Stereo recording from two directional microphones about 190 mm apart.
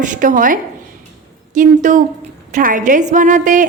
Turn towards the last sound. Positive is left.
turn(degrees=-45)  # may be behind; listen again after turning